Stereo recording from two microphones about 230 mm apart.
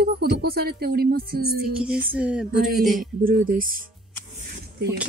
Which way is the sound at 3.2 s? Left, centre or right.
Right.